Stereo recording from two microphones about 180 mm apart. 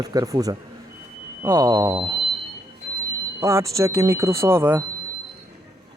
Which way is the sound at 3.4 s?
15° right (ahead or behind).